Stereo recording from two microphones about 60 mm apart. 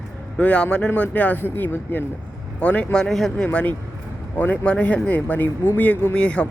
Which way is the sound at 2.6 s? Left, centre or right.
Left.